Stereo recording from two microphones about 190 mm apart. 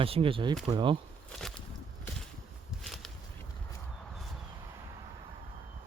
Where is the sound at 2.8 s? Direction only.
Centre (ahead or behind).